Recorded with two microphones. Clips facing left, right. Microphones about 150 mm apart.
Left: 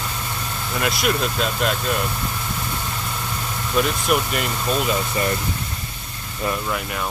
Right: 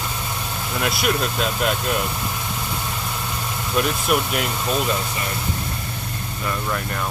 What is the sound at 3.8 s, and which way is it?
Speech, centre (ahead or behind).